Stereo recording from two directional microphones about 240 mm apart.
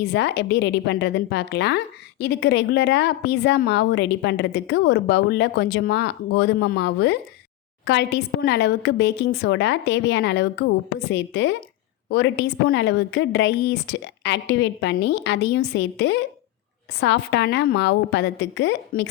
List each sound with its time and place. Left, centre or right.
0.0 s a woman's voice: left